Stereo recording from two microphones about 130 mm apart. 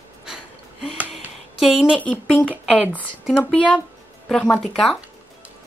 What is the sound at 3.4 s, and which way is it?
Speech, 10° left (ahead or behind).